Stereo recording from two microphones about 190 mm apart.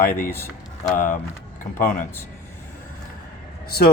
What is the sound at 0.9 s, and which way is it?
A man's voice, 45° left (ahead or behind).